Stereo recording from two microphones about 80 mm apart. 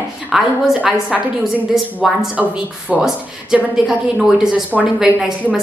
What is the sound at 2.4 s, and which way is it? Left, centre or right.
Speech, centre.